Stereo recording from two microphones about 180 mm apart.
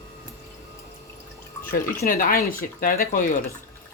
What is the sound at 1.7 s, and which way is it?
Speech, 55° left (ahead or behind).